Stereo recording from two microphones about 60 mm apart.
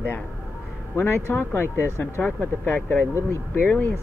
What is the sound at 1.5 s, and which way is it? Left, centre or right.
Speech, left.